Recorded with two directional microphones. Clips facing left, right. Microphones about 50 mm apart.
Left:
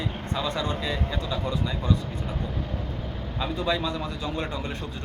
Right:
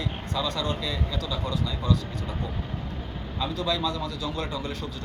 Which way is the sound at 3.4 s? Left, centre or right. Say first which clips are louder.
Left 1 dB; left.